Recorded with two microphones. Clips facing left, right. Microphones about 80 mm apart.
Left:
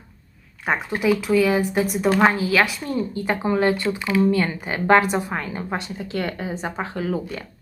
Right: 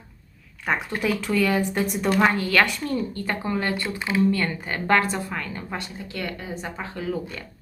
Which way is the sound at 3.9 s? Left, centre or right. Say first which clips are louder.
Left 3 dB; right.